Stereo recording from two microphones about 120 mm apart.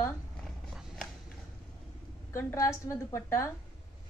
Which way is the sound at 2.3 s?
25° left (ahead or behind).